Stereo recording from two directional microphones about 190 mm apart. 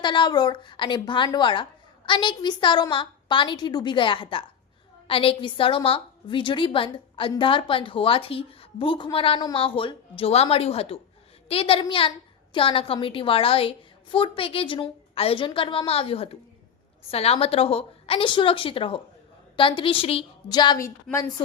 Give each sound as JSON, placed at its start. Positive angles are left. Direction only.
{"t": 0.0, "sound": "a woman's voice", "side_deg": 25}